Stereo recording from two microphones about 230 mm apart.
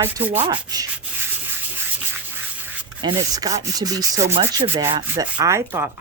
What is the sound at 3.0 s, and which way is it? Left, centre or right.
Rub, centre.